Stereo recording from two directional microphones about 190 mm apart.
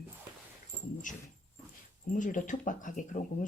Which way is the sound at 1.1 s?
40° left (ahead or behind).